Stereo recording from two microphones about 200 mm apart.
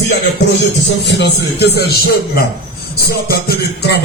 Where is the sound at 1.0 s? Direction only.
60° left (ahead or behind).